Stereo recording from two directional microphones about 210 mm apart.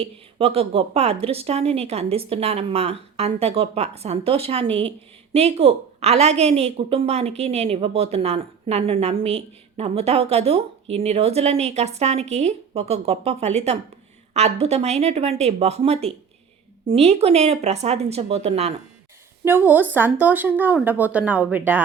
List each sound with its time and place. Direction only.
0.0 s speech: 25° right (ahead or behind)
19.5 s speech: 10° right (ahead or behind)